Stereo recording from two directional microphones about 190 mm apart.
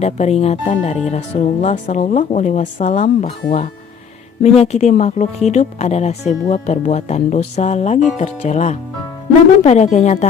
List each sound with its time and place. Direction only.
0.0 s speech: 35° left (ahead or behind)